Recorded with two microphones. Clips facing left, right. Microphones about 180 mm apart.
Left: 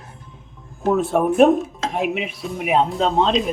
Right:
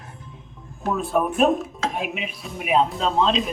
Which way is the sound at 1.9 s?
75° left (ahead or behind).